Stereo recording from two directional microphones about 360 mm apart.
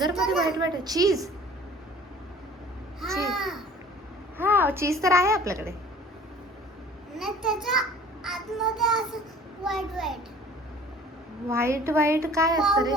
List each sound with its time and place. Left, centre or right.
0.1 s a child's voice: centre
0.5 s a child's voice: centre
3.0 s babbling: centre
4.4 s a child's voice: centre
7.2 s a child's voice: centre
11.4 s a child's voice: centre